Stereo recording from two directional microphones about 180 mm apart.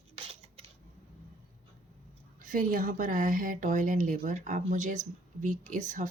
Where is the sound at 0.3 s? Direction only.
35° right (ahead or behind).